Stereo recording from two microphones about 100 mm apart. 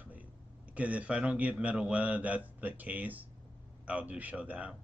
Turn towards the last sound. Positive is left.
turn(degrees=-15)  # may be behind; listen again after turning